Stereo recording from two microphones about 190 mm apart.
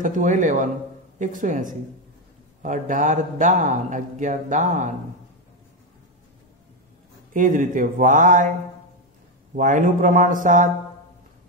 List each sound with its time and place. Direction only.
0.0 s speech: 45° right (ahead or behind)
7.3 s speech: 45° right (ahead or behind)
9.6 s speech: 45° right (ahead or behind)